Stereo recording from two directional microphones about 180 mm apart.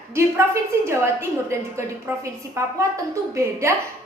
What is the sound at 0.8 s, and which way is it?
Speech, 15° right (ahead or behind).